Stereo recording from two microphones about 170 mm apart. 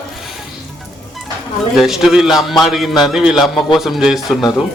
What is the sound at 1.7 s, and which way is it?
A man's voice, centre (ahead or behind).